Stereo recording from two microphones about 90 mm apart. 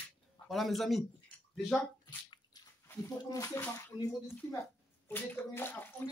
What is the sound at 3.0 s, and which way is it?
Speech, 35° left (ahead or behind).